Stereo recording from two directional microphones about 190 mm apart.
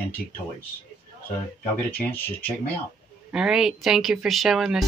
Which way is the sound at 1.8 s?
10° left (ahead or behind).